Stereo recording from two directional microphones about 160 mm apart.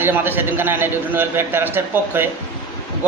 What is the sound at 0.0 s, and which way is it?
A man's voice, 10° right (ahead or behind).